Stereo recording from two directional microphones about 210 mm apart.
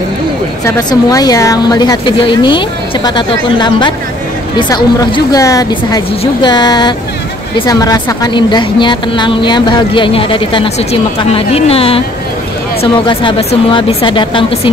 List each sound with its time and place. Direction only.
0.7 s a woman's voice: 15° left (ahead or behind)
13.0 s a woman's voice: 25° left (ahead or behind)